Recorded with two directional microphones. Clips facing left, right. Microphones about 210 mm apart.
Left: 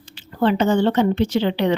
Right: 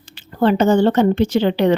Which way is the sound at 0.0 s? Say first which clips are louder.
Right 3 dB; 50° right (ahead or behind).